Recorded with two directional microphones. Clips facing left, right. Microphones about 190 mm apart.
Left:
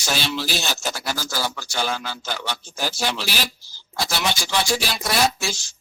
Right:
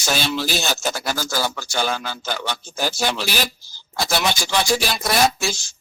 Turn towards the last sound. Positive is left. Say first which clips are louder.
# right 3 dB
turn(degrees=-45)  # may be behind; listen again after turning